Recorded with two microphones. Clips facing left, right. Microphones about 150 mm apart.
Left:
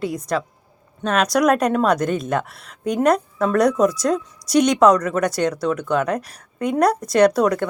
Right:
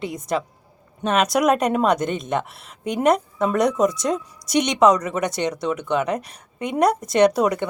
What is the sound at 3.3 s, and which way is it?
Speech, 20° right (ahead or behind).